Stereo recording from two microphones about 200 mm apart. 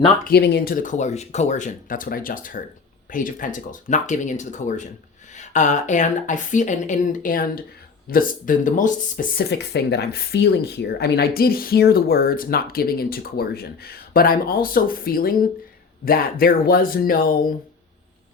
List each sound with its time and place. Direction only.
0.3 s speech: 55° left (ahead or behind)